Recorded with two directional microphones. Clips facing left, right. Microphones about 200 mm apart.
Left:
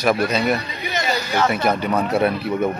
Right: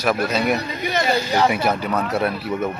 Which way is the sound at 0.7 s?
50° right (ahead or behind).